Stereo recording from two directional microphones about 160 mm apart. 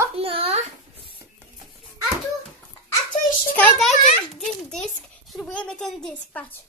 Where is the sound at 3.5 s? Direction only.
5° left (ahead or behind).